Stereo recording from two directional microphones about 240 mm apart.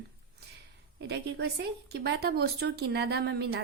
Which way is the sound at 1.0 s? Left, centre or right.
Right.